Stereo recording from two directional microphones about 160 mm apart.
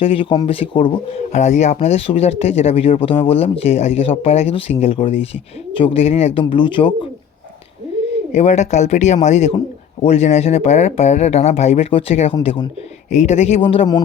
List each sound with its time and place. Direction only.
0.0 s speech: 35° left (ahead or behind)
1.3 s speech: 45° left (ahead or behind); by 7.1 s 30° left (ahead or behind)
8.3 s speech: 45° left (ahead or behind)
13.1 s speech: 45° left (ahead or behind)